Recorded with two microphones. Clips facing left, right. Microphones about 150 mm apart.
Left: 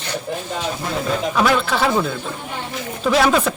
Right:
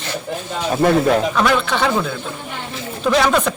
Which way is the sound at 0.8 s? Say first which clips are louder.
Right 12 dB; 60° right (ahead or behind).